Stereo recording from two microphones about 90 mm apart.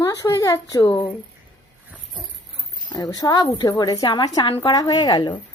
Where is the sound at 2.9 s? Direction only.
45° left (ahead or behind).